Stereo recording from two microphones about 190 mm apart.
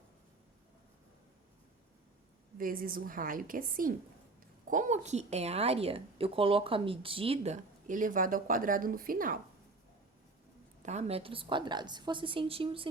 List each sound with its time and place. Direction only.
2.6 s a woman's voice: 50° right (ahead or behind)
10.8 s a woman's voice: 35° right (ahead or behind)